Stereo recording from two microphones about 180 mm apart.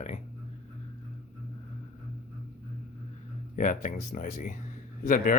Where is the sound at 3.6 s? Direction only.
45° left (ahead or behind).